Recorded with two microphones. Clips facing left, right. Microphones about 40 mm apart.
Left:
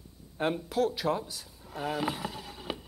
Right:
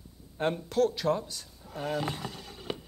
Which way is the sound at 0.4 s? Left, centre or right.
Centre.